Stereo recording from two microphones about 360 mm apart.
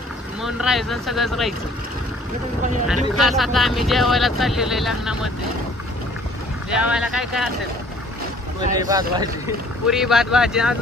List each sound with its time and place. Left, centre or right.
0.4 s speech: centre
3.2 s speech: centre
6.7 s speech: centre
8.7 s speech: centre